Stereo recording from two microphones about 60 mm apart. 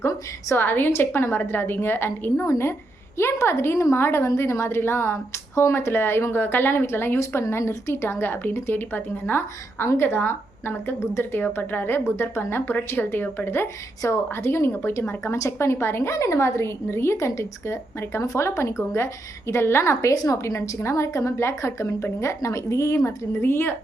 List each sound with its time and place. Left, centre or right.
0.5 s a woman's voice: left
2.3 s a woman's voice: left
14.0 s a woman's voice: left
20.1 s a woman's voice: left
23.4 s speech: left